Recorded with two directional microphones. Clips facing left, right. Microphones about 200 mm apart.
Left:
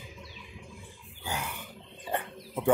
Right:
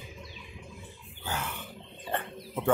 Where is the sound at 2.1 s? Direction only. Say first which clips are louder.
Left 1 dB; 10° left (ahead or behind).